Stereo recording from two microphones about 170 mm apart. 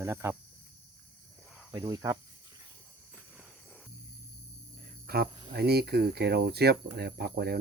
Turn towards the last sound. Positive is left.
turn(degrees=-70)  # may be behind; listen again after turning